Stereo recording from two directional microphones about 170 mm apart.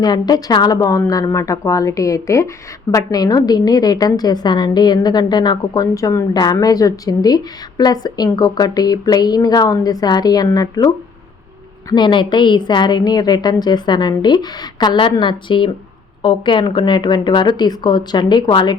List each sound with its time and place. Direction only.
0.0 s a woman's voice: 25° left (ahead or behind)